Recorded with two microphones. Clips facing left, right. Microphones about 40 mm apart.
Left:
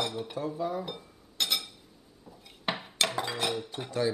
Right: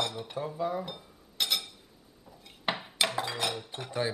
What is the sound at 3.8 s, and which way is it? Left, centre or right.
Speech, right.